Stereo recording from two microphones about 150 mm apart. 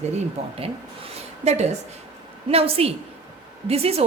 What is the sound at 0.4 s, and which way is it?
Speech, 45° right (ahead or behind).